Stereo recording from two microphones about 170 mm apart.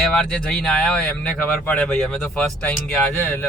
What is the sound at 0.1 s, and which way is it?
Speech, 5° left (ahead or behind).